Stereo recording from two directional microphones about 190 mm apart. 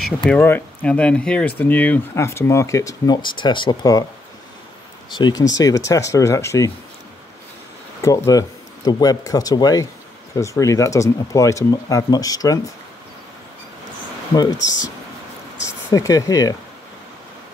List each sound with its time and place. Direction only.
0.3 s speech: 10° left (ahead or behind)
5.1 s speech: 25° left (ahead or behind)
8.0 s speech: 15° left (ahead or behind)
14.3 s speech: 20° left (ahead or behind)
14.6 s speech: 75° left (ahead or behind)
15.6 s speech: 15° left (ahead or behind)